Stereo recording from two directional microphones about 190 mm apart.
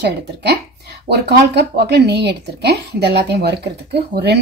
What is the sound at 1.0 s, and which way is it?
Speech, 60° right (ahead or behind).